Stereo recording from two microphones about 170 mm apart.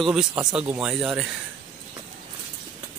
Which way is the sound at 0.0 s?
5° right (ahead or behind).